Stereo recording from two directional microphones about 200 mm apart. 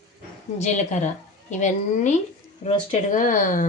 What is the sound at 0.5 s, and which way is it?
Speech, 35° left (ahead or behind).